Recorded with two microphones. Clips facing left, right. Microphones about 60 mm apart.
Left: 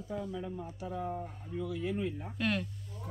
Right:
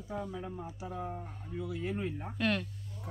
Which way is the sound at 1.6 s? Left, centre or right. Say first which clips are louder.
Left 1 dB; right.